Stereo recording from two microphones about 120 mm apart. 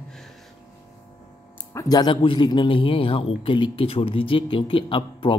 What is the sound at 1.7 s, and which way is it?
A man's voice, 35° left (ahead or behind).